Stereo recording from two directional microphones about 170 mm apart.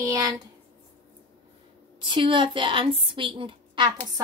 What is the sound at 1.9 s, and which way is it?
A woman's voice, 30° right (ahead or behind).